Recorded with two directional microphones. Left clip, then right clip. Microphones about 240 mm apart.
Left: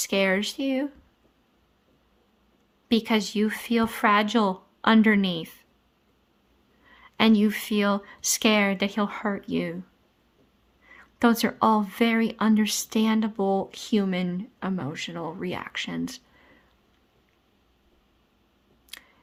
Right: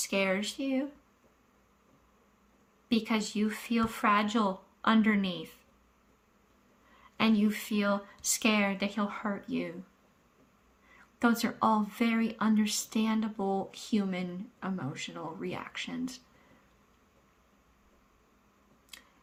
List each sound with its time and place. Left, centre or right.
0.0 s speech: left
2.9 s speech: left
6.9 s speech: left
10.9 s speech: left
18.9 s scissors: left